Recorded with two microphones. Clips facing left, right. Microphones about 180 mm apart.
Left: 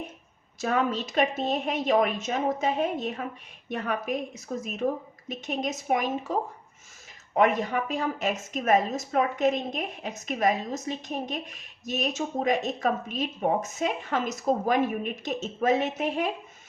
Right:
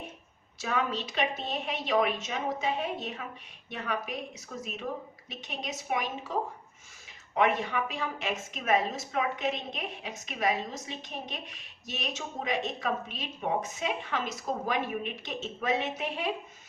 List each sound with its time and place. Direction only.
0.6 s a woman's voice: 45° left (ahead or behind)
7.3 s a woman's voice: 45° left (ahead or behind)